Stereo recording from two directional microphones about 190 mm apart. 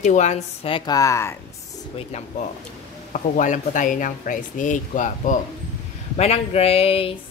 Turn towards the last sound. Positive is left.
turn(degrees=30)  # may be behind; listen again after turning